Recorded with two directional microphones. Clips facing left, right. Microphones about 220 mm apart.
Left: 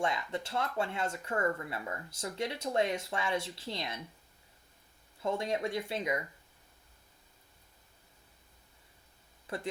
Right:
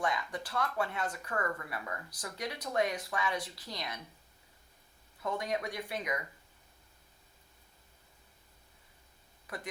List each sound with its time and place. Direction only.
0.0 s speech: 25° left (ahead or behind)
5.2 s speech: 25° left (ahead or behind)
9.5 s speech: 25° left (ahead or behind)